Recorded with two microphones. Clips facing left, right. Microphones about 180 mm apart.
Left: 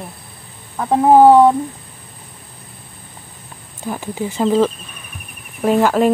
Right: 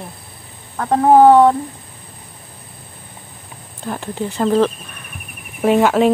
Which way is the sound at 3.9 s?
10° left (ahead or behind).